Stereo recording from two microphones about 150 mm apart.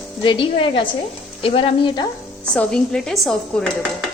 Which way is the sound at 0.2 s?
35° left (ahead or behind).